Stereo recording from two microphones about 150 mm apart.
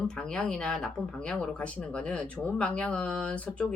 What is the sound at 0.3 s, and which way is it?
Speech, 5° left (ahead or behind).